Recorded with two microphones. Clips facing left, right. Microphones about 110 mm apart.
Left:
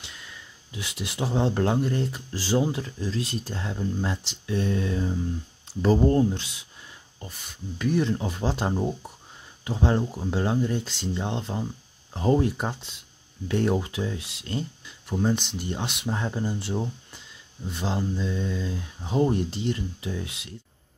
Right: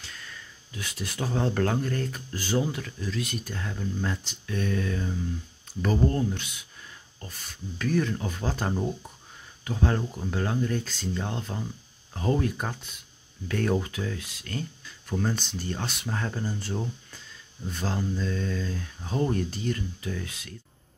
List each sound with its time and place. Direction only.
0.0 s speech: 15° left (ahead or behind)
7.8 s speech: 25° left (ahead or behind)